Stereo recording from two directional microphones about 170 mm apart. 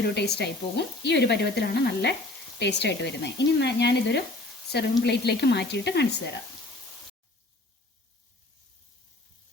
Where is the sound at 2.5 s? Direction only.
90° left.